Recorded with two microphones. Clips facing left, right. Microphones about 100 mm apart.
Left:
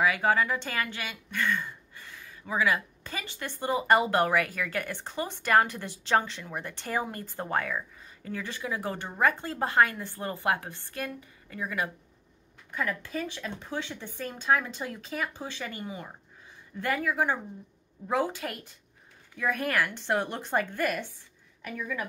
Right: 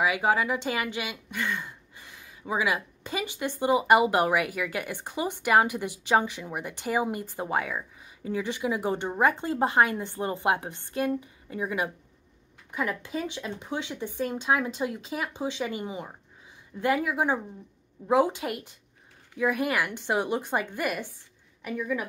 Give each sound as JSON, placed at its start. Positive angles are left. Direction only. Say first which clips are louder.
{"t": 0.0, "sound": "a woman's voice", "louder": "even", "side_deg": -15}